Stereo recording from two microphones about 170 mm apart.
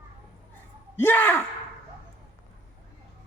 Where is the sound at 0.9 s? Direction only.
10° left (ahead or behind).